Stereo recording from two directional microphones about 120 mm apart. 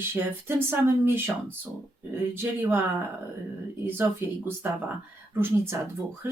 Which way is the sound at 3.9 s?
15° right (ahead or behind).